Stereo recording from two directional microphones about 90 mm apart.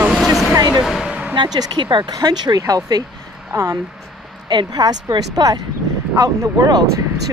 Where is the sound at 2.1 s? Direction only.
45° right (ahead or behind).